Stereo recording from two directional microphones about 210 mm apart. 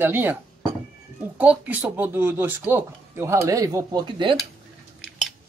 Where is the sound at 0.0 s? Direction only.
10° right (ahead or behind).